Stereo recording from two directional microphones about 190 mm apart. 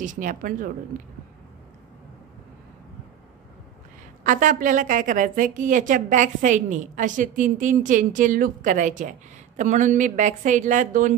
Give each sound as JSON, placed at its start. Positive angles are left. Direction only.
{"t": 0.0, "sound": "a woman's voice", "side_deg": -45}
{"t": 4.2, "sound": "a woman's voice", "side_deg": -45}